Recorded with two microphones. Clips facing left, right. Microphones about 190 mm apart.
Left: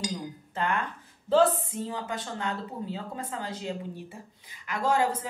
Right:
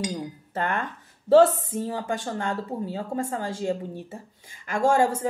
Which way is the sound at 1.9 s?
45° right (ahead or behind).